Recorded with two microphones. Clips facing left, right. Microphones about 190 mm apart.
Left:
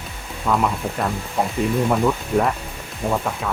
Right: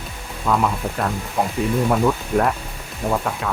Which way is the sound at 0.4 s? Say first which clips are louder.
Even; centre (ahead or behind).